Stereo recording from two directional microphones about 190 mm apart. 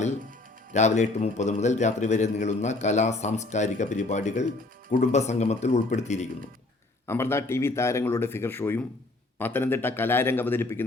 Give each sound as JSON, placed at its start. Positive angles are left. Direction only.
{"t": 0.7, "sound": "a man's voice", "side_deg": 35}
{"t": 7.1, "sound": "speech", "side_deg": 15}